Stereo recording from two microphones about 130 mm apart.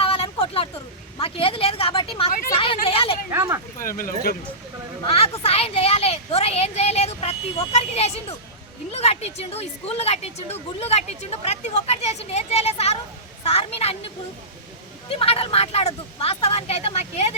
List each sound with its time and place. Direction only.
0.0 s a sound: 45° left (ahead or behind)
1.2 s speech: 45° left (ahead or behind)
3.2 s speech: 20° right (ahead or behind)
3.8 s speech: 90° left
5.5 s speech: 50° left (ahead or behind)
15.1 s speech: 45° left (ahead or behind)